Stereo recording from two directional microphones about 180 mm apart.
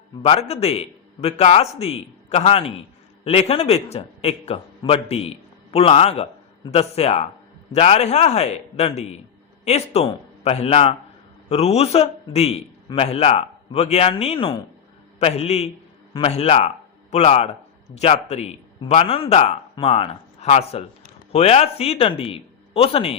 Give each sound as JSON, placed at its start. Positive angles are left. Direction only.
{"t": 0.2, "sound": "a man's voice", "side_deg": 35}